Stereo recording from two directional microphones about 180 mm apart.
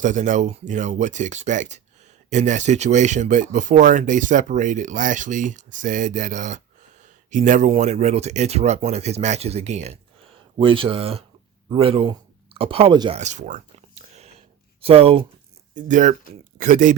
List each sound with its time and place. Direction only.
0.0 s speech: 45° right (ahead or behind); by 13.1 s 30° right (ahead or behind)
13.1 s a sound: 40° right (ahead or behind)
15.7 s speech: 45° right (ahead or behind)